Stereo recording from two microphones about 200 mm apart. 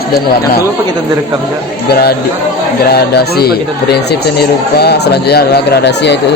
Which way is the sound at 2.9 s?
55° left (ahead or behind).